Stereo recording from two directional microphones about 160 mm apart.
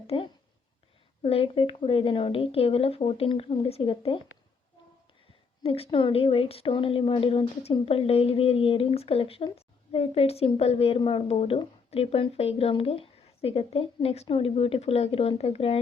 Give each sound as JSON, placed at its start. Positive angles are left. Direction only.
{"t": 0.1, "sound": "a woman's voice", "side_deg": 35}
{"t": 5.6, "sound": "a woman's voice", "side_deg": 35}